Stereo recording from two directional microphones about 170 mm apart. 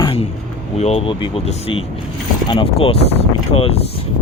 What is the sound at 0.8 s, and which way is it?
Speech, 35° left (ahead or behind).